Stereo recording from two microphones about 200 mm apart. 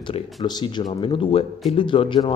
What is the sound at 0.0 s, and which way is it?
Speech, 20° left (ahead or behind).